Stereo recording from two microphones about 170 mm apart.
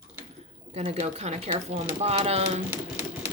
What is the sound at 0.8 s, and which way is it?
Speech, 40° right (ahead or behind).